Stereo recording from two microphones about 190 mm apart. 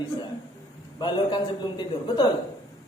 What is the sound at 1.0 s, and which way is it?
A man's voice, 25° left (ahead or behind).